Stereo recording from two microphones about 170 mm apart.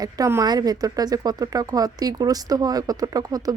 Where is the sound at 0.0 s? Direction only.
20° right (ahead or behind).